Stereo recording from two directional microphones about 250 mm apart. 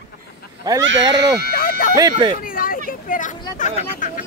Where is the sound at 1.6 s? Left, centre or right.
Left.